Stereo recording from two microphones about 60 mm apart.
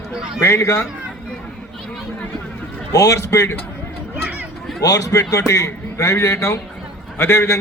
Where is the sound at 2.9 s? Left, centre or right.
Left.